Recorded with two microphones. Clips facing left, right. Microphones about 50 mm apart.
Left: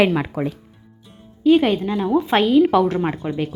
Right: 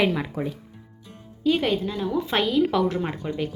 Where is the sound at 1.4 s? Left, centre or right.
Left.